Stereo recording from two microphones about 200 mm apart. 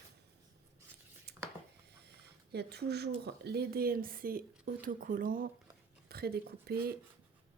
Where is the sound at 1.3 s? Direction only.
55° right (ahead or behind).